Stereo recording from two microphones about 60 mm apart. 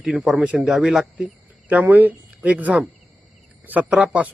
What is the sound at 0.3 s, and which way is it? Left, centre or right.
Speech, right.